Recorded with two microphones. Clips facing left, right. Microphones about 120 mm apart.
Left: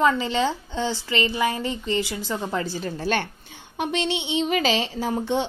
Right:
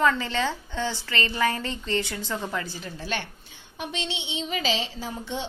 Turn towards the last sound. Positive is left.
turn(degrees=60)  # may be behind; listen again after turning